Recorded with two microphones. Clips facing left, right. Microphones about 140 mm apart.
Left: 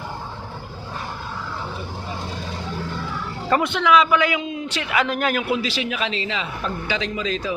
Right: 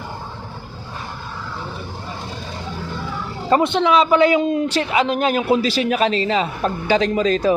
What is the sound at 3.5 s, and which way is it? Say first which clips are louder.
Speech: right 2 dB; 25° right (ahead or behind).